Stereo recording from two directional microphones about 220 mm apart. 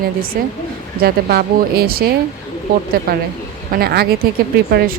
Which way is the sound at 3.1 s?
45° right (ahead or behind).